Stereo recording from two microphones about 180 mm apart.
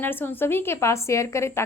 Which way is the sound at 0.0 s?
10° left (ahead or behind).